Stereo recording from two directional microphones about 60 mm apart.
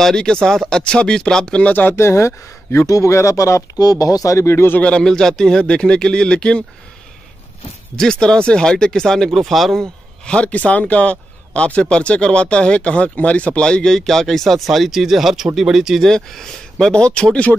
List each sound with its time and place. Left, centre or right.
0.0 s speech: centre
1.6 s speech: left
2.0 s speech: left
4.7 s speech: centre
5.0 s speech: centre
7.9 s speech: centre
10.2 s speech: centre
16.0 s speech: centre